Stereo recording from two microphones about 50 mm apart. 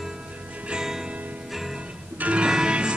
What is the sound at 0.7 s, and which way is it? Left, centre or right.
Music, centre.